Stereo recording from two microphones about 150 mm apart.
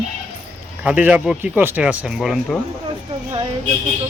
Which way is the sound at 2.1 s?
Centre (ahead or behind).